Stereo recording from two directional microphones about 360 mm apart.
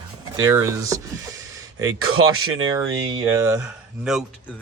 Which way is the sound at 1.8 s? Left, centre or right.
Right.